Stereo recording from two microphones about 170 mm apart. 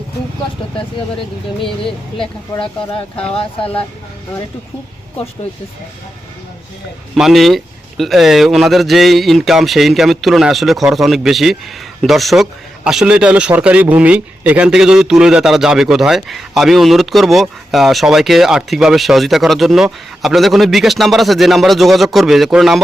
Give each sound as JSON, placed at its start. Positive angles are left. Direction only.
{"t": 2.1, "sound": "speech", "side_deg": 30}
{"t": 3.6, "sound": "speech", "side_deg": 10}
{"t": 7.2, "sound": "a man's voice", "side_deg": 0}